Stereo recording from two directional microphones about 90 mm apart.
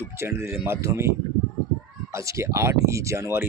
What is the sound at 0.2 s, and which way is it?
Speech, 25° right (ahead or behind).